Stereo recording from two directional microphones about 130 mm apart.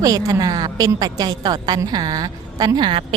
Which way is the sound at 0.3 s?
30° right (ahead or behind).